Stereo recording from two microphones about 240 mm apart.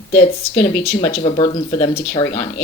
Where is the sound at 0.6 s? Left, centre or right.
Left.